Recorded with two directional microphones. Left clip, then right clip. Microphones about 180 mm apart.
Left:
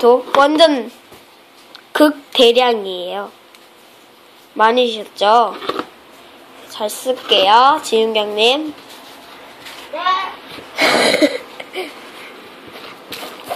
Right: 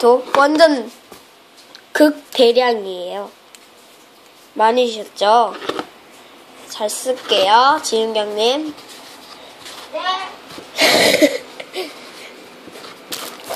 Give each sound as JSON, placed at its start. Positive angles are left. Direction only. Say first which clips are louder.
{"t": 0.0, "sound": "speech", "louder": "left 1 dB", "side_deg": -5}
{"t": 1.9, "sound": "speech", "louder": "left 1 dB", "side_deg": 0}
{"t": 4.6, "sound": "speech", "louder": "left 1 dB", "side_deg": 0}
{"t": 10.7, "sound": "wheeze", "louder": "even", "side_deg": -5}